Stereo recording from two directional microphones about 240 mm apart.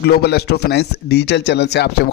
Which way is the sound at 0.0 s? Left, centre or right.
Left.